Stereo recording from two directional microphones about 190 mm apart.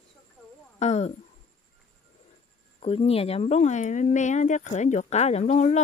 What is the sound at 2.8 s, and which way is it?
Speech, 30° left (ahead or behind).